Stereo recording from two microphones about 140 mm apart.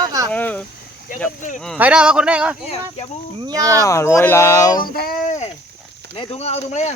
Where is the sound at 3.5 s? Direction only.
25° right (ahead or behind).